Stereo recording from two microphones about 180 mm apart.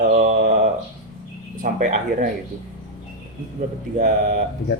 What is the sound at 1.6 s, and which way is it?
Speech, 45° right (ahead or behind).